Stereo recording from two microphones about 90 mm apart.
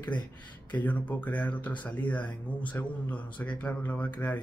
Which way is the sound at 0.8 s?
20° left (ahead or behind).